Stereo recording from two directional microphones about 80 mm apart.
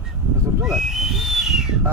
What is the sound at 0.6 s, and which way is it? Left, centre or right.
Speech, centre.